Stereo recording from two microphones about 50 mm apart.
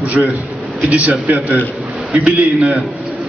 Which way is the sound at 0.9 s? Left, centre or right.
Right.